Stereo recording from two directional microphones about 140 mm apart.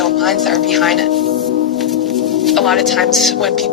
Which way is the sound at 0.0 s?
Centre (ahead or behind).